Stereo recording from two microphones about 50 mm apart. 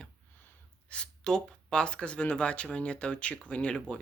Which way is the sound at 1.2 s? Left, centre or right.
Centre.